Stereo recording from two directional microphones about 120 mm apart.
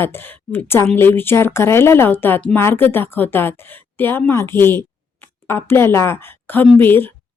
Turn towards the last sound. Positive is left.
turn(degrees=20)  # may be behind; listen again after turning